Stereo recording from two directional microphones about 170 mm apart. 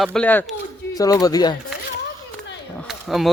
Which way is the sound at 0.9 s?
20° left (ahead or behind).